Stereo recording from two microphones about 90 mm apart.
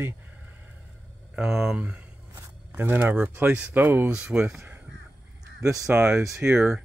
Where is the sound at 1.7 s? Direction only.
15° right (ahead or behind).